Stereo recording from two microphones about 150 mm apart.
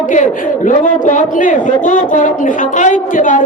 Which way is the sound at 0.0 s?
60° left (ahead or behind).